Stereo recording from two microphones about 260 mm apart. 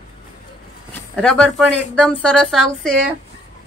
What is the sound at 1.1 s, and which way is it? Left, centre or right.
Speech, centre.